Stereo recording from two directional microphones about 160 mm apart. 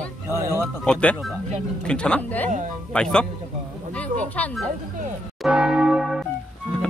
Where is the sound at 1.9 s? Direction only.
5° left (ahead or behind).